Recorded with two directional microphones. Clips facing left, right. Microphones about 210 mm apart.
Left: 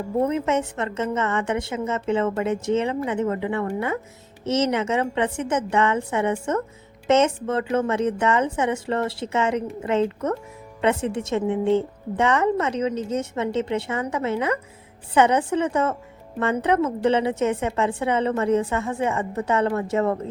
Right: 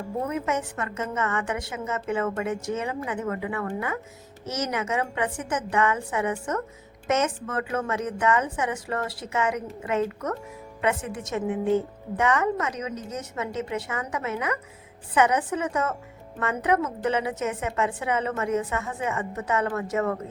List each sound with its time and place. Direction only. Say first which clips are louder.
0.3 s a woman's voice: left 5 dB; 25° left (ahead or behind)